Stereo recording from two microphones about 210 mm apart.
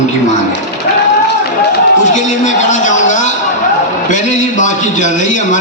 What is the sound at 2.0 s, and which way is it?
A man's voice, 35° left (ahead or behind).